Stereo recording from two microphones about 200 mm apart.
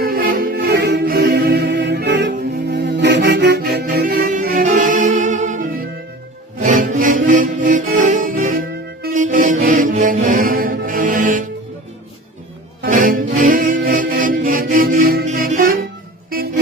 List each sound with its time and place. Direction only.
0.0 s music: 50° right (ahead or behind)
12.8 s music: 45° right (ahead or behind)